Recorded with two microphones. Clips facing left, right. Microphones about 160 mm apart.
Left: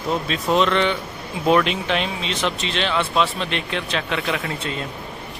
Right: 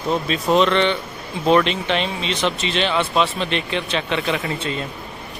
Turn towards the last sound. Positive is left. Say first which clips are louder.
# right 2 dB
turn(degrees=0)  # may be behind; listen again after turning